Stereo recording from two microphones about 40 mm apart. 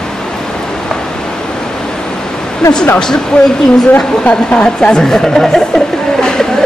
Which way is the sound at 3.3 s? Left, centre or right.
Left.